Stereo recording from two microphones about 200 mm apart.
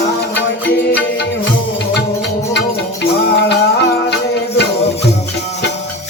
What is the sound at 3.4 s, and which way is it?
Music, 60° left (ahead or behind).